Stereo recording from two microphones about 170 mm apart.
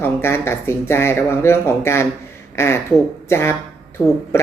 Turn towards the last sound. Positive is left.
turn(degrees=15)  # may be behind; listen again after turning